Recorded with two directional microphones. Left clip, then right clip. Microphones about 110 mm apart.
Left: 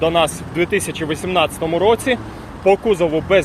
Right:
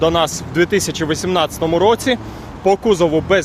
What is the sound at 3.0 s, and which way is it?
Speech, 70° right (ahead or behind).